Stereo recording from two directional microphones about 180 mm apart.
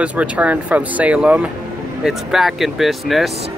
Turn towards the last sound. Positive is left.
turn(degrees=0)  # may be behind; listen again after turning